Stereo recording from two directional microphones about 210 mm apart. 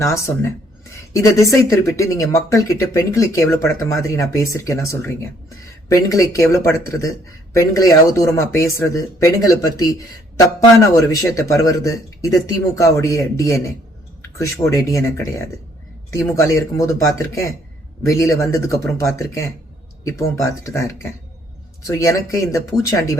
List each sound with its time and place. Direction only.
0.9 s speech: 15° left (ahead or behind)
14.7 s speech: 15° left (ahead or behind)